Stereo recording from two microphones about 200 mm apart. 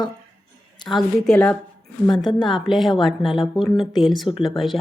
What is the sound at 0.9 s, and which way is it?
Speech, centre (ahead or behind).